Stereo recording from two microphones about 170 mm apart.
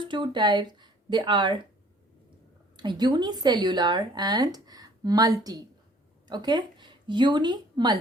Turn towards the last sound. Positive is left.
turn(degrees=-25)  # may be behind; listen again after turning